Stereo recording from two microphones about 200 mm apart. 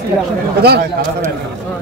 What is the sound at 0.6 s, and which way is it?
Speech, 55° right (ahead or behind).